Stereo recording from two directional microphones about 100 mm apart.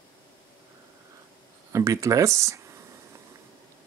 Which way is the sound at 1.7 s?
35° right (ahead or behind).